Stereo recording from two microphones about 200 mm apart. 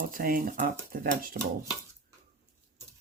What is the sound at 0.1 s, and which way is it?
Speech, 45° right (ahead or behind).